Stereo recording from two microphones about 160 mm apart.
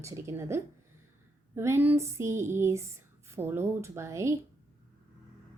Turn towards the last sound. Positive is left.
turn(degrees=-15)  # may be behind; listen again after turning